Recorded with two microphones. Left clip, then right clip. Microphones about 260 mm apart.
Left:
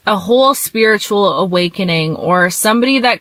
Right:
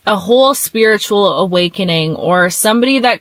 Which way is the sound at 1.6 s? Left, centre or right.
Right.